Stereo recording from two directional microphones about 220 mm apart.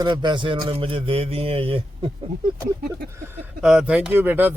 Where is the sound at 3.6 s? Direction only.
5° right (ahead or behind).